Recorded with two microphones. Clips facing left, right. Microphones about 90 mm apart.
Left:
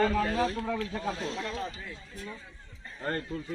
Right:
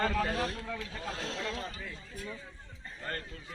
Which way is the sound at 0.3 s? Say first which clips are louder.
Left 6 dB; 90° left.